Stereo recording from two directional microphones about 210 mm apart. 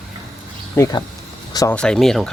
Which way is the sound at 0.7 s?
15° left (ahead or behind).